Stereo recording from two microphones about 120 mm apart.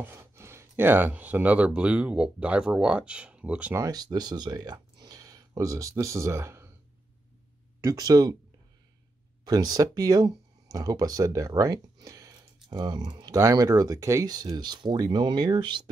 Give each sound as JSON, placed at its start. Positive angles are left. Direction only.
{"t": 0.0, "sound": "speech", "side_deg": -20}
{"t": 3.7, "sound": "speech", "side_deg": -30}
{"t": 7.8, "sound": "speech", "side_deg": -30}
{"t": 9.4, "sound": "speech", "side_deg": -35}